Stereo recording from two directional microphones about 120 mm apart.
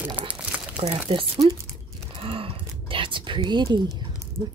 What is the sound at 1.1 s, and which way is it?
Speech, 60° right (ahead or behind).